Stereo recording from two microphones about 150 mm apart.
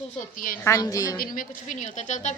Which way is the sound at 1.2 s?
60° left (ahead or behind).